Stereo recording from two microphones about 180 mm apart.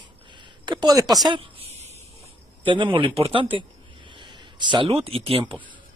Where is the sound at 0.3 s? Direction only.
25° right (ahead or behind).